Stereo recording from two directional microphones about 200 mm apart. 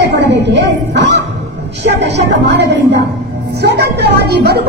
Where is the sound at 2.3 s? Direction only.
60° right (ahead or behind).